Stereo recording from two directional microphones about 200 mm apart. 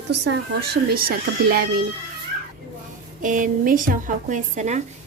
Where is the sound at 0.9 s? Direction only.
45° right (ahead or behind).